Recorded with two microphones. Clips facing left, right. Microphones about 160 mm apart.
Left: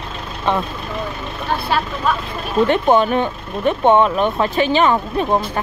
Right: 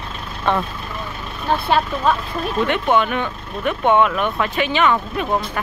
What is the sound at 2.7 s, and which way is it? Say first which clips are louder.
Speech: left 4 dB; 35° left (ahead or behind).